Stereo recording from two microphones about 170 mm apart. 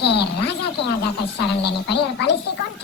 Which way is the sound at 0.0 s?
80° left.